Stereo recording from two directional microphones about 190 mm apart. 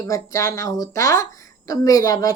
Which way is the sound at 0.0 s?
15° left (ahead or behind).